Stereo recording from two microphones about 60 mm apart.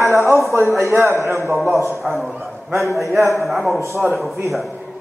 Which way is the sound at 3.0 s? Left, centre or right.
Right.